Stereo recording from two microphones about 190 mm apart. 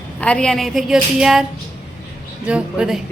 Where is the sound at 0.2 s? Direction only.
5° left (ahead or behind).